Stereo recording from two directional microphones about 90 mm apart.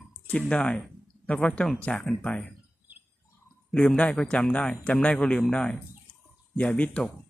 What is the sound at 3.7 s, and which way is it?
Speech, 10° left (ahead or behind).